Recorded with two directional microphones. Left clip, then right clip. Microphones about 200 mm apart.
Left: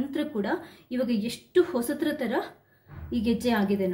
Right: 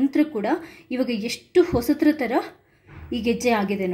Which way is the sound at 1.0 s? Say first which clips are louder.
Right 3 dB; 35° right (ahead or behind).